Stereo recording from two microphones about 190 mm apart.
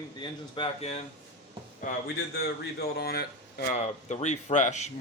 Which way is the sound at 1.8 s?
45° left (ahead or behind).